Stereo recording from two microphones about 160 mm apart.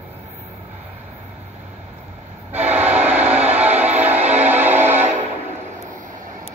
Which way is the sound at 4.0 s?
10° right (ahead or behind).